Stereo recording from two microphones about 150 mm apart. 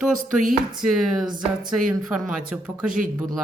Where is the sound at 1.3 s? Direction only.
30° right (ahead or behind).